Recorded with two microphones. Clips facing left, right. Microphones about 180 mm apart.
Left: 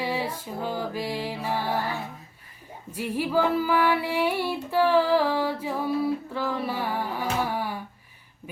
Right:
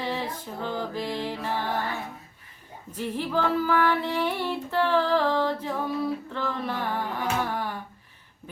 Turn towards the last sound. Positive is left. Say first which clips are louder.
# left 1 dB
turn(degrees=10)  # may be behind; listen again after turning